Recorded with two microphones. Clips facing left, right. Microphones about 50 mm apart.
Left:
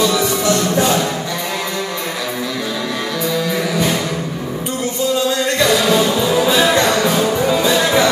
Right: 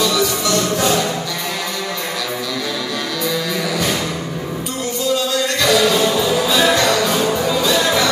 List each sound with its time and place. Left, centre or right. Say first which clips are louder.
0.0 s music: left 2 dB; left
5.6 s music: even; left